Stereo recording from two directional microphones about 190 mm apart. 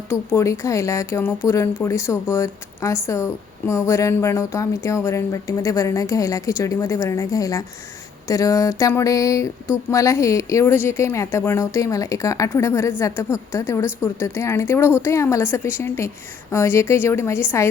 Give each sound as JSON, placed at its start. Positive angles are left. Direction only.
{"t": 0.1, "sound": "speech", "side_deg": 15}